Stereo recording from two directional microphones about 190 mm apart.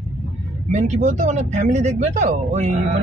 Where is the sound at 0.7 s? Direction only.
40° right (ahead or behind).